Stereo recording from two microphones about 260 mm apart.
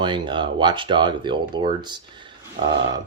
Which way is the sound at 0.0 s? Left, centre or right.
Centre.